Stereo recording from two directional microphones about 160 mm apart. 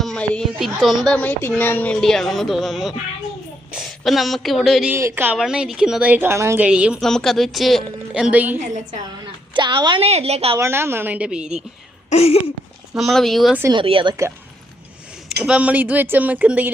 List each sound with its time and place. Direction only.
0.0 s speech: 5° left (ahead or behind)
4.9 s a woman's voice: 15° right (ahead or behind)
8.5 s a woman's voice: 50° right (ahead or behind)
9.2 s a woman's voice: 30° right (ahead or behind)
10.6 s a woman's voice: 15° right (ahead or behind)
12.1 s speech: 40° left (ahead or behind)
13.0 s speech: centre (ahead or behind)
13.7 s a woman's voice: 35° right (ahead or behind)
15.4 s a woman's voice: 5° right (ahead or behind)